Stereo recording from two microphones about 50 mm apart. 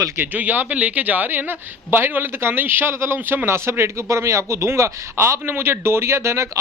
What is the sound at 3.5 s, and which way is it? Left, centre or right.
Speech, right.